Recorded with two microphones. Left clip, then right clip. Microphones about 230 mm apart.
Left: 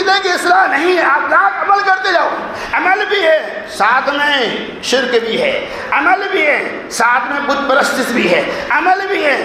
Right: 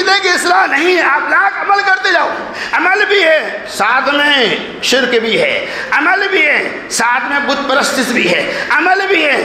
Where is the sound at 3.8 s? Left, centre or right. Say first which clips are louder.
Right 1 dB; right.